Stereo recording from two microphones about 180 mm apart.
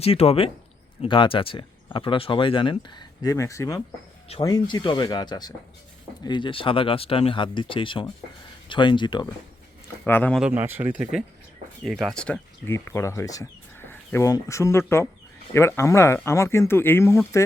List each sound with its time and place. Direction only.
0.0 s speech: 35° left (ahead or behind)
10.1 s speech: 10° left (ahead or behind)
10.4 s speech: 10° right (ahead or behind); by 17.4 s 15° left (ahead or behind)